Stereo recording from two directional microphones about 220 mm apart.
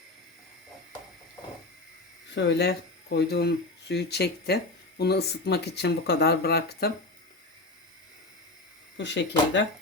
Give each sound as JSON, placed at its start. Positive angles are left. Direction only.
{"t": 2.3, "sound": "speech", "side_deg": 50}
{"t": 9.0, "sound": "speech", "side_deg": 55}